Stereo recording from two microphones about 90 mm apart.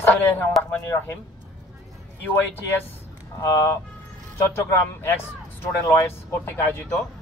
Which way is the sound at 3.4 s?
35° left (ahead or behind).